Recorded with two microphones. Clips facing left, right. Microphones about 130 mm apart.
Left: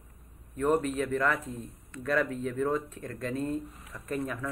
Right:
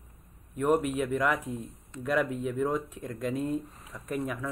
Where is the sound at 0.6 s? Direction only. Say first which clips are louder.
Right 1 dB; 10° right (ahead or behind).